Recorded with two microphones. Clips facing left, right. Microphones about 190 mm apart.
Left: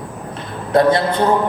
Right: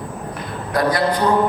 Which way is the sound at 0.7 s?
25° left (ahead or behind).